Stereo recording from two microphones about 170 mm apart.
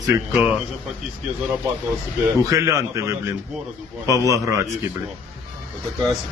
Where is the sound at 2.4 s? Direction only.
20° right (ahead or behind).